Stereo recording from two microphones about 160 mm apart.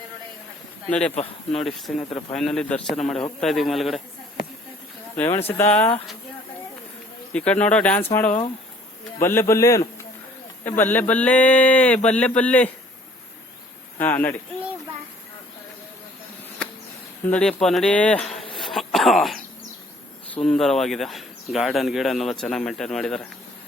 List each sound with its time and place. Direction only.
0.9 s speech: 5° left (ahead or behind)
2.0 s speech: 40° left (ahead or behind)
2.3 s speech: 5° left (ahead or behind)
5.1 s speech: 15° left (ahead or behind)
7.3 s speech: 10° left (ahead or behind)
14.0 s speech: 10° left (ahead or behind)
17.2 s speech: 5° left (ahead or behind)